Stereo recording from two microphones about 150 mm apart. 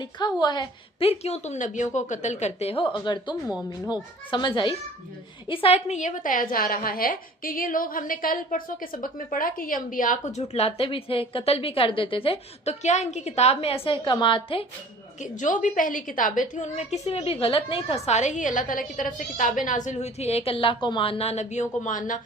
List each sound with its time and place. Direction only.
0.0 s a woman's voice: 30° left (ahead or behind)
15.2 s a woman's voice: 55° left (ahead or behind)